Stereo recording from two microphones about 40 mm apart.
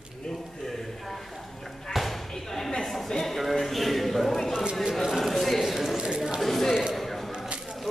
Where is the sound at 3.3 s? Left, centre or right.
Centre.